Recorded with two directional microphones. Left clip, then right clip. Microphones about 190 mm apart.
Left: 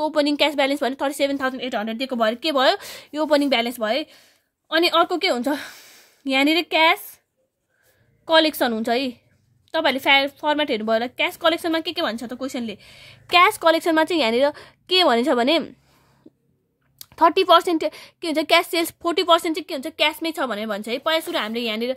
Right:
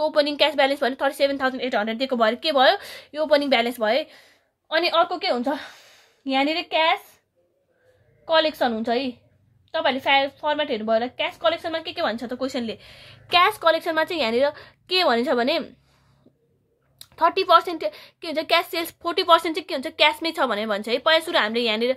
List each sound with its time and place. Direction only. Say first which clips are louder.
0.0 s a woman's voice: even; 40° left (ahead or behind); by 7.2 s 60° left (ahead or behind)
8.3 s a woman's voice: left 2 dB; 60° left (ahead or behind); by 15.7 s 35° left (ahead or behind)
17.0 s a woman's voice: left 4 dB; 40° left (ahead or behind)